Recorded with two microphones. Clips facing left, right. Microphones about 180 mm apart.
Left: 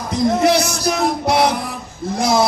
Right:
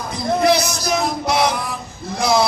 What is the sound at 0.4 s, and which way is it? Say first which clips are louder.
Music: left 1 dB; 70° left (ahead or behind).